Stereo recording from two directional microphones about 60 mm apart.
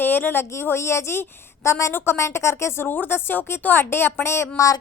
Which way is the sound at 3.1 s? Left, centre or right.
Left.